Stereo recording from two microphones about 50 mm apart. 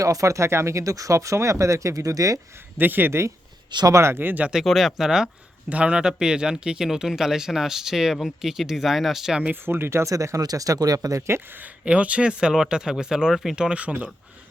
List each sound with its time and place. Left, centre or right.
0.2 s speech: right
2.7 s speech: right
3.1 s speech: right
4.2 s speech: right
4.6 s speech: centre
5.6 s speech: right; by 9.4 s centre
9.5 s speech: right
11.3 s speech: right
11.9 s speech: right; by 13.6 s centre
13.6 s speech: right